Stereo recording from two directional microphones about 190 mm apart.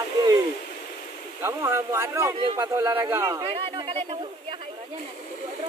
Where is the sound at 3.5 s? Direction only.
25° right (ahead or behind).